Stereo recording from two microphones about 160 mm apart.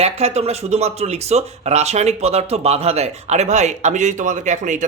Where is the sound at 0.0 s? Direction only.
40° right (ahead or behind).